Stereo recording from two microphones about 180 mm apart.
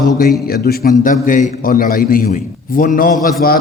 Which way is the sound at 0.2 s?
55° left (ahead or behind).